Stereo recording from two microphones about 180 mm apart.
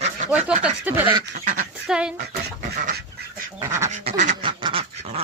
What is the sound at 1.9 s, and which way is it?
Speech, 5° right (ahead or behind).